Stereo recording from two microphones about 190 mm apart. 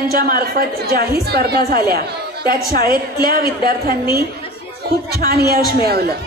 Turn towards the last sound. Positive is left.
turn(degrees=-55)  # may be behind; listen again after turning